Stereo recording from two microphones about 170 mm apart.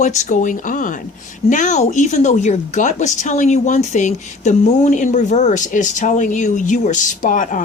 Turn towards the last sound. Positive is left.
turn(degrees=50)  # may be behind; listen again after turning